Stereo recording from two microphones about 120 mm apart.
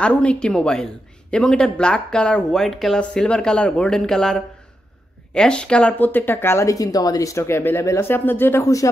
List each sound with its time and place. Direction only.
0.0 s a woman's voice: 10° left (ahead or behind); by 8.9 s 25° left (ahead or behind)